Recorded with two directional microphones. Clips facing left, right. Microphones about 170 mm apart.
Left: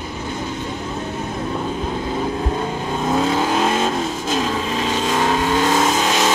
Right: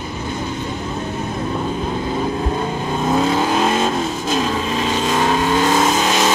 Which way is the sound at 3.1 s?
15° right (ahead or behind).